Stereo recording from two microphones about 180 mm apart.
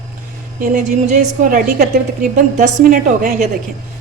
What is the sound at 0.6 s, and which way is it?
A woman's voice, 40° right (ahead or behind).